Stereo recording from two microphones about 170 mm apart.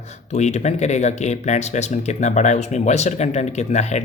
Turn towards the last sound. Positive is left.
turn(degrees=40)  # may be behind; listen again after turning